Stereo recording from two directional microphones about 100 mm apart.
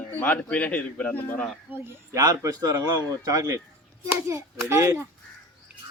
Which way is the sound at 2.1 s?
35° right (ahead or behind).